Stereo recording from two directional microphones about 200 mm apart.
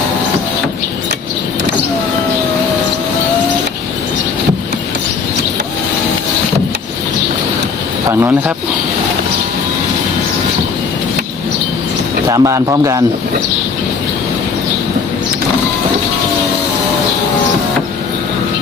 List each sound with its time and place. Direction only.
8.1 s speech: 15° right (ahead or behind)
12.3 s speech: 15° right (ahead or behind)